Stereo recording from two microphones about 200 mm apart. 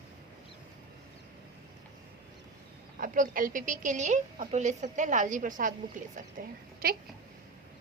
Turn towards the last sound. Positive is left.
turn(degrees=-50)  # may be behind; listen again after turning